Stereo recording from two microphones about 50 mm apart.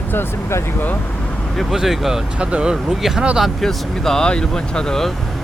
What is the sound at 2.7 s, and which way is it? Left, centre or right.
Speech, centre.